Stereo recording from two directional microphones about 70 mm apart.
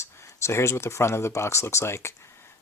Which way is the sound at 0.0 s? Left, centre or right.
Left.